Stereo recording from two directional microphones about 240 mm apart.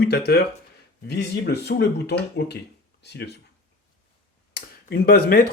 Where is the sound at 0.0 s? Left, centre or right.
Left.